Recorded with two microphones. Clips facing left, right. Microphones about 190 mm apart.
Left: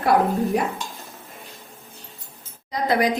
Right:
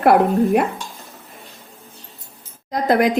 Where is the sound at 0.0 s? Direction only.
60° right (ahead or behind).